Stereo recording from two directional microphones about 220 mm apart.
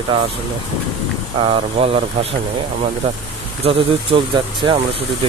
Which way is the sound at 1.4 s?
25° right (ahead or behind).